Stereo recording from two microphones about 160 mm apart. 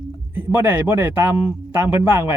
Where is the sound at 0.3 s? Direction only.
15° right (ahead or behind).